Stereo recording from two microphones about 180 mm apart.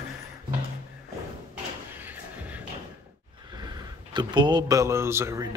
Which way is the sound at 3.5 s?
20° right (ahead or behind).